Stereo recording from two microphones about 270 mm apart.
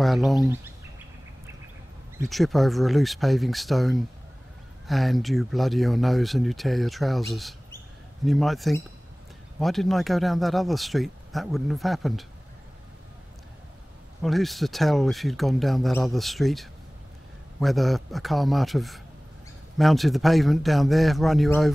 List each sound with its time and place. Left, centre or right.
0.0 s speech: centre
2.2 s speech: centre
14.2 s speech: centre